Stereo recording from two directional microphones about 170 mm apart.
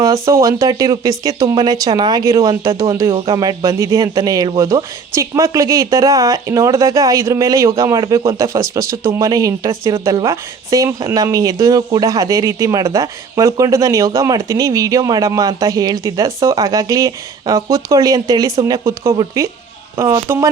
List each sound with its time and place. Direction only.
0.0 s speech: 20° right (ahead or behind)